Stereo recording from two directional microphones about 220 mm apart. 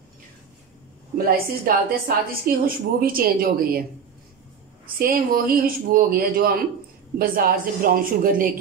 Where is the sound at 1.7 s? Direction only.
40° right (ahead or behind).